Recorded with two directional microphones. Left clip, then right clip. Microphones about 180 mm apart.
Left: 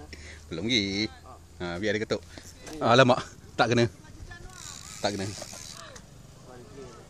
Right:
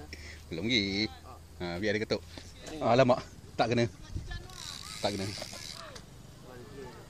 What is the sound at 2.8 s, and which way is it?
A man's voice, 35° left (ahead or behind).